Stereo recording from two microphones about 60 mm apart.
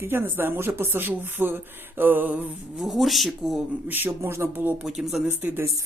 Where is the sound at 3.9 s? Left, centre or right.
Right.